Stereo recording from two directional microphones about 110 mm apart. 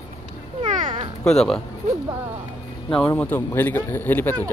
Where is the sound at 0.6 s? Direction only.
90° right.